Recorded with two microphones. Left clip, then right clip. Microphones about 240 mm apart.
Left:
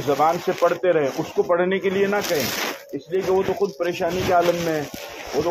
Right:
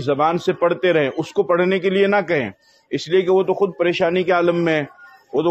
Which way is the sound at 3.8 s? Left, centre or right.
Right.